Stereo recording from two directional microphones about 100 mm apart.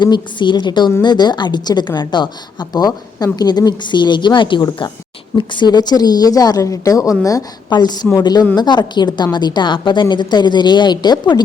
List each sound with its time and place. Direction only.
0.0 s a woman's voice: 50° left (ahead or behind)